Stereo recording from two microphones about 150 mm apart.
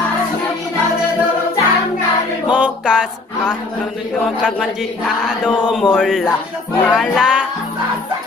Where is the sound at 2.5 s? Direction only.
5° right (ahead or behind).